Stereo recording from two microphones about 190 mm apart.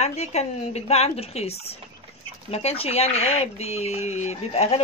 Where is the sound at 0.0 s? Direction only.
35° left (ahead or behind).